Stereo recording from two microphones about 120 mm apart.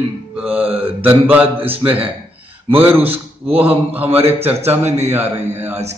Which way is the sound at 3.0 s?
55° right (ahead or behind).